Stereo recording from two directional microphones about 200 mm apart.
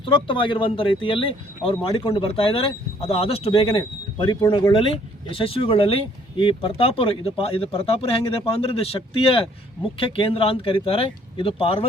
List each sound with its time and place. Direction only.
0.0 s speech: 25° left (ahead or behind)